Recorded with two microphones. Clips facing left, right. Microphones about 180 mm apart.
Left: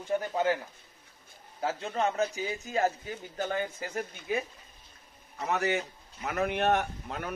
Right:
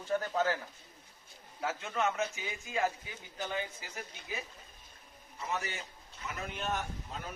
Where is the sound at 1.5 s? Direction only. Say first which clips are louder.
Left 4 dB; 30° left (ahead or behind); by 4.4 s 55° left (ahead or behind).